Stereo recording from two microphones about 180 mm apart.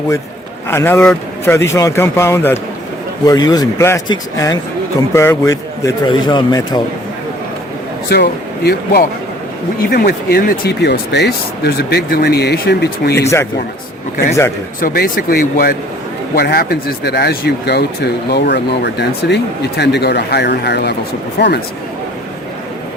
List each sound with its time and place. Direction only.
0.7 s a man's voice: 15° left (ahead or behind)
8.1 s speech: 65° left (ahead or behind)
14.8 s speech: 50° left (ahead or behind); by 21.6 s 65° left (ahead or behind)